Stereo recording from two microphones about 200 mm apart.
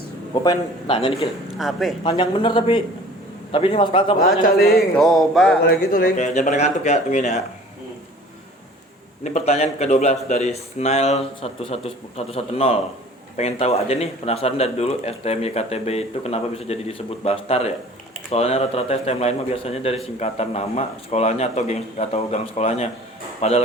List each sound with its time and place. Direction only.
0.4 s a man's voice: 25° left (ahead or behind)
1.5 s speech: centre (ahead or behind)
2.0 s a man's voice: 25° left (ahead or behind)
4.5 s speech: centre (ahead or behind)
5.6 s speech: 45° left (ahead or behind)
9.2 s speech: 35° left (ahead or behind)